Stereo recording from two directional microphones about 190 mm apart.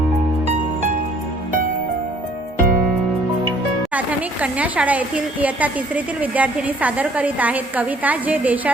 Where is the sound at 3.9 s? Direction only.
5° right (ahead or behind).